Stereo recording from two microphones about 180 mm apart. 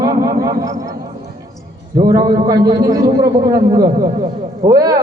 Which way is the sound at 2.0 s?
20° right (ahead or behind).